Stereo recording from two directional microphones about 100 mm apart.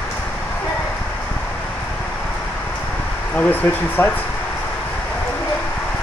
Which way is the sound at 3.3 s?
20° left (ahead or behind).